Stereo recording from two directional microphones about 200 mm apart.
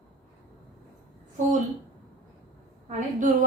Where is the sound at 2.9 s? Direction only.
40° right (ahead or behind).